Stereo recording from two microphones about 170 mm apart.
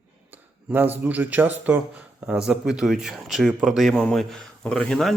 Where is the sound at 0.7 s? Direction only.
10° right (ahead or behind).